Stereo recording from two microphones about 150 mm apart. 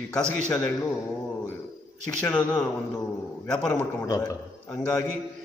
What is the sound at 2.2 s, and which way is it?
A man's voice, 10° left (ahead or behind).